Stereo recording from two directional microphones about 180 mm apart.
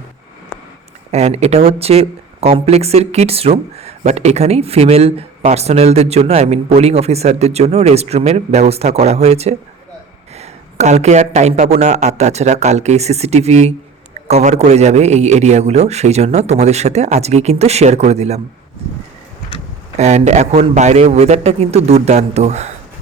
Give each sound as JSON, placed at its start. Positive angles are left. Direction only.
{"t": 1.1, "sound": "speech", "side_deg": -35}
{"t": 20.0, "sound": "speech", "side_deg": -40}